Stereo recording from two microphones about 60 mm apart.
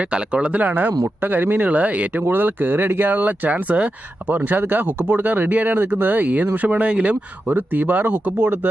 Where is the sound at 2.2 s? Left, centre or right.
Right; by 7.1 s centre.